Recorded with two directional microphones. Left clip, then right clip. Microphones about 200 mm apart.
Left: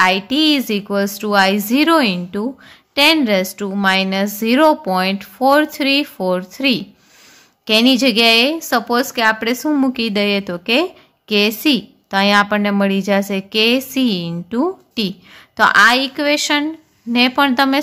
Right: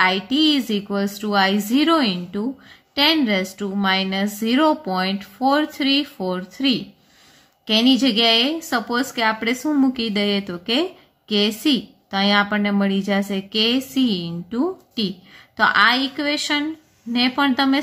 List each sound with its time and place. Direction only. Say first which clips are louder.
0.0 s speech: left 4 dB; 35° left (ahead or behind)